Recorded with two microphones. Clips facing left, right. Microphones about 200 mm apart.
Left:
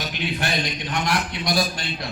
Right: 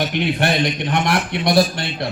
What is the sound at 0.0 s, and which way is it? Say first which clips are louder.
A man's voice: right 8 dB; 60° right (ahead or behind).